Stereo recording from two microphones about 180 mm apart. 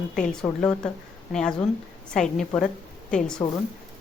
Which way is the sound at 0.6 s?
5° left (ahead or behind).